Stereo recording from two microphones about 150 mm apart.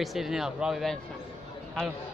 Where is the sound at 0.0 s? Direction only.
Centre (ahead or behind).